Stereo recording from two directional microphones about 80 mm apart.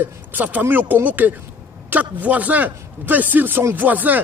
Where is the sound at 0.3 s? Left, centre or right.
Right.